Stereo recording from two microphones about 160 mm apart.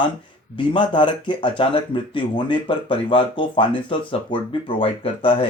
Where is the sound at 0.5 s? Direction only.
30° left (ahead or behind).